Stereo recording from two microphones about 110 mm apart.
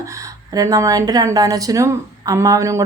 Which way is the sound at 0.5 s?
30° right (ahead or behind).